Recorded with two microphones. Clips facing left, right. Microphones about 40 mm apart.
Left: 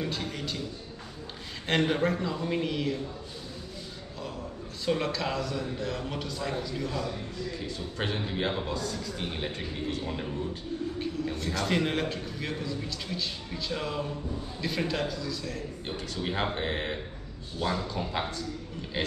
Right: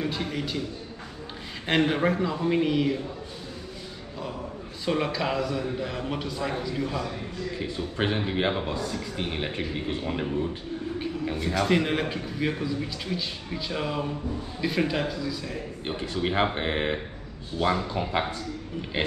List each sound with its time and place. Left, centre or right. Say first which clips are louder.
0.0 s a man's voice: right 4 dB; centre
1.7 s a man's voice: right 3 dB; centre
4.8 s a man's voice: right 3 dB; centre
11.3 s a man's voice: right 6 dB; centre